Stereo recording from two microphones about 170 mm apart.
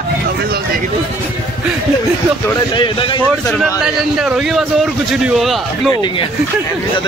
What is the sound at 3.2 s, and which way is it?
A man's voice, 5° left (ahead or behind).